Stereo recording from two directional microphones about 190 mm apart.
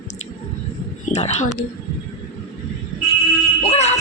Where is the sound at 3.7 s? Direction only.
35° left (ahead or behind).